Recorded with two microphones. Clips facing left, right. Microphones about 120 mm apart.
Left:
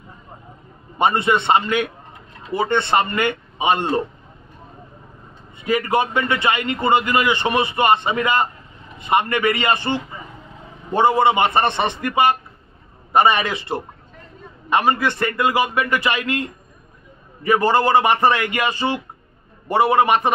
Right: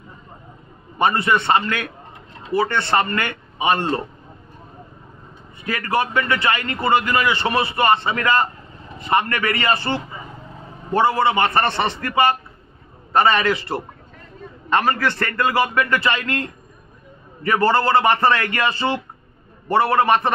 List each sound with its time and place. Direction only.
0.9 s speech: 20° left (ahead or behind)
5.6 s a man's voice: 20° left (ahead or behind)